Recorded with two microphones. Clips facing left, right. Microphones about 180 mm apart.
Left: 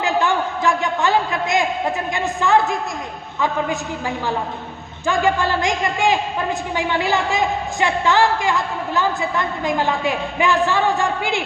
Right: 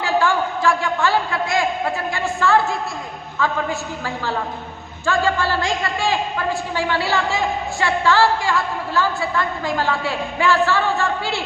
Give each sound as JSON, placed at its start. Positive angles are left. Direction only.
{"t": 0.0, "sound": "a man's voice", "side_deg": 20}